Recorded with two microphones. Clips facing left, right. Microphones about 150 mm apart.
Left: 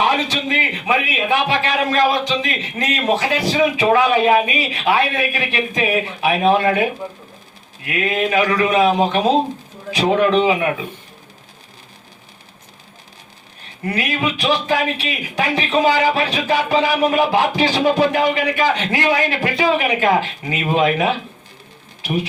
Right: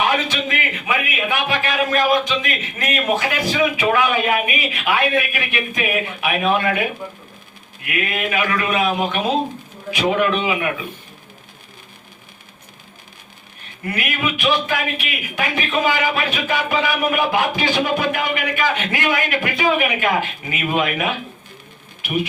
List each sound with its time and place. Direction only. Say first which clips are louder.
0.0 s speech: left 2 dB; 30° left (ahead or behind)
13.8 s speech: left 3 dB; 35° left (ahead or behind)